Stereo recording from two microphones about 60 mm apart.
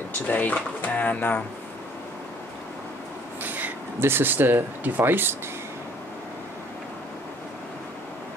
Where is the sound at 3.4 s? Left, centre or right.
Right.